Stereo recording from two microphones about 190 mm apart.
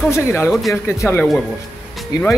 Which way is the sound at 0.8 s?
10° left (ahead or behind).